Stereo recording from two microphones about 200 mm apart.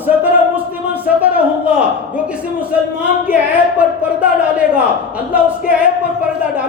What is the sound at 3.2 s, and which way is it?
A man's voice, 5° right (ahead or behind).